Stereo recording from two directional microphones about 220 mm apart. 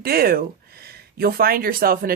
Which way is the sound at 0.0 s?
45° right (ahead or behind).